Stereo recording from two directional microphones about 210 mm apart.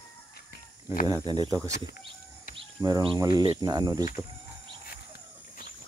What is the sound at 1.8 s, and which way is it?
Bird, 45° left (ahead or behind).